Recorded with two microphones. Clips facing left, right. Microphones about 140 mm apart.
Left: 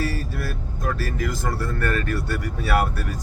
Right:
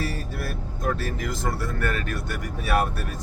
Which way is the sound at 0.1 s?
25° right (ahead or behind).